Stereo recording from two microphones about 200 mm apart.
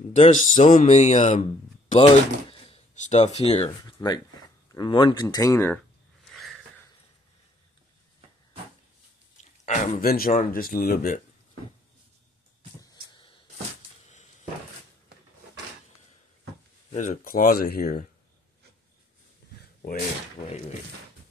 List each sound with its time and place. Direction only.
0.1 s speech: 35° left (ahead or behind); by 5.8 s 15° left (ahead or behind)
6.2 s a sound: centre (ahead or behind)
9.4 s speech: 40° left (ahead or behind)
16.9 s speech: 40° left (ahead or behind)
20.4 s speech: 20° left (ahead or behind)